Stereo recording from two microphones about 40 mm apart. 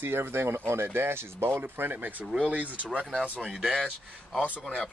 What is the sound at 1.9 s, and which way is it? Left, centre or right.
Speech, right.